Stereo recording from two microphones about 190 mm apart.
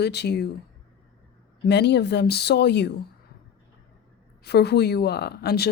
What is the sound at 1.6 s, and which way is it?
A woman's voice, 65° left (ahead or behind).